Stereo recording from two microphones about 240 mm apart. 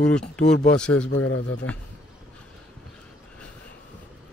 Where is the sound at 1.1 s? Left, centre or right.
Left.